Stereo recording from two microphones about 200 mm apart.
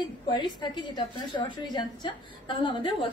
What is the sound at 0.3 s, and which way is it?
A woman's voice, 20° left (ahead or behind).